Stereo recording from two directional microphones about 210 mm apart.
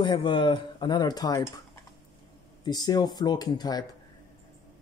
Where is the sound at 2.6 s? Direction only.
20° left (ahead or behind).